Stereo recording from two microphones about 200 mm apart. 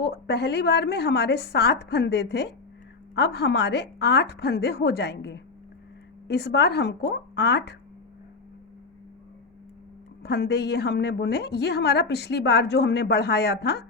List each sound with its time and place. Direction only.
0.0 s a woman's voice: 55° left (ahead or behind)
10.2 s a woman's voice: 55° left (ahead or behind)